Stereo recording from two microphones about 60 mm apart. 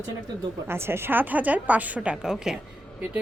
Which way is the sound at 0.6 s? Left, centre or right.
Right.